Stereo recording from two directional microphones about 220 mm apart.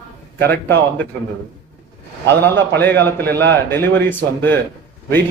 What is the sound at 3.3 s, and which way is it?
Speech, 50° right (ahead or behind).